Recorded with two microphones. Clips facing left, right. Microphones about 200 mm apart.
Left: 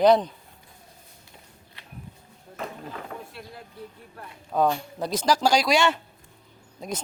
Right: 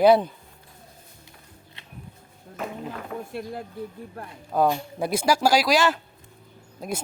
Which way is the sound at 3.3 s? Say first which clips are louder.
Right 10 dB; 50° right (ahead or behind).